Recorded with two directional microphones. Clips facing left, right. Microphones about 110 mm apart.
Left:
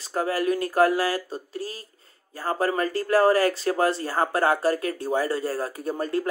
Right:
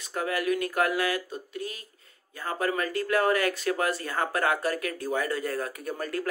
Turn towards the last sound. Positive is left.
turn(degrees=25)  # may be behind; listen again after turning